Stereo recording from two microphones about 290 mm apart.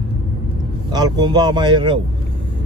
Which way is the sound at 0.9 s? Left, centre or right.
Centre.